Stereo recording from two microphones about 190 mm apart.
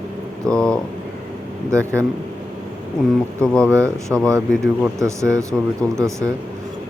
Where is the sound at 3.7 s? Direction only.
15° right (ahead or behind).